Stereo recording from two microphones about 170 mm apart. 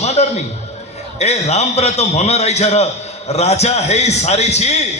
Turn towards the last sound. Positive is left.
turn(degrees=40)  # may be behind; listen again after turning